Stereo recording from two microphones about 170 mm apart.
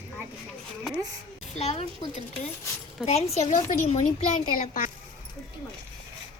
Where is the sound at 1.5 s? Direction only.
40° left (ahead or behind).